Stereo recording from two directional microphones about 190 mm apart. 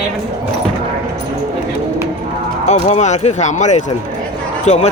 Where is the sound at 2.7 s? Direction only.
35° left (ahead or behind).